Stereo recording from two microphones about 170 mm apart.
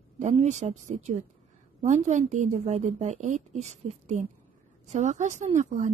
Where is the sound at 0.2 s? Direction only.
40° right (ahead or behind).